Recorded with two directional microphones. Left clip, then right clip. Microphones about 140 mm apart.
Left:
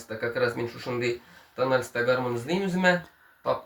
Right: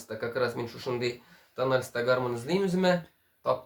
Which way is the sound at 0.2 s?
30° right (ahead or behind).